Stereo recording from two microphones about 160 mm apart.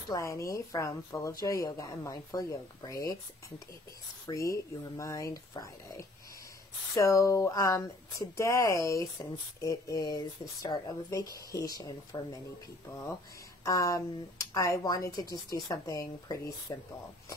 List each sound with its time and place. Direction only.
0.1 s speech: 20° left (ahead or behind)
13.7 s speech: 20° left (ahead or behind)